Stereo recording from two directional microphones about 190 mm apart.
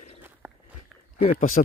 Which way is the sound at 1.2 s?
40° left (ahead or behind).